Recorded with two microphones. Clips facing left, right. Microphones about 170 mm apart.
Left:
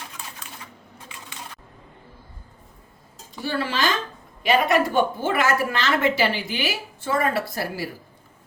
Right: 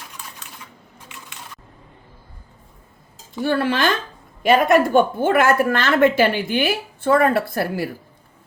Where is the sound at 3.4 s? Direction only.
55° right (ahead or behind).